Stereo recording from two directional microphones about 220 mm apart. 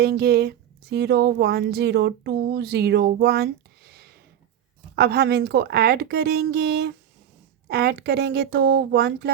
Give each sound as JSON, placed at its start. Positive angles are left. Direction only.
{"t": 0.0, "sound": "speech", "side_deg": -45}